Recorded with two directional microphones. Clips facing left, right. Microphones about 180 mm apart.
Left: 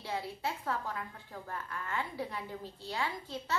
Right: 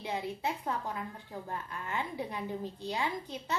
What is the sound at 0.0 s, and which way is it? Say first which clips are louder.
A woman's voice: right 2 dB; 20° right (ahead or behind).